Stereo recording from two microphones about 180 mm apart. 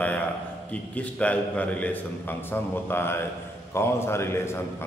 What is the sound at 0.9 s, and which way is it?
A man's voice, 10° left (ahead or behind).